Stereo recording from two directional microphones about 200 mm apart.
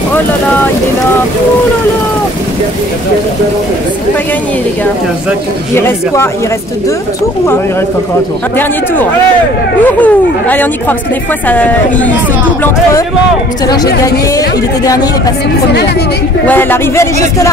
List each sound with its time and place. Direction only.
5.8 s speech: 10° left (ahead or behind)
9.8 s speech: 10° left (ahead or behind)
16.4 s speech: 10° left (ahead or behind)